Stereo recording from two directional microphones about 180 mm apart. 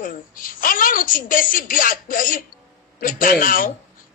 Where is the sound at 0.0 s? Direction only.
50° left (ahead or behind).